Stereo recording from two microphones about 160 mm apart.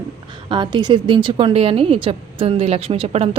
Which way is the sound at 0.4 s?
30° right (ahead or behind).